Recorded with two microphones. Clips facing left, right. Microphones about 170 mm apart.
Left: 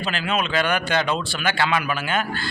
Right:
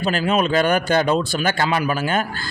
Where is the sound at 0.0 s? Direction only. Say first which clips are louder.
Right 6 dB; 40° right (ahead or behind).